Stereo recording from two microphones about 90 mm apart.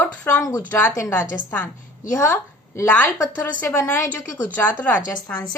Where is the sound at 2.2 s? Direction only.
30° left (ahead or behind).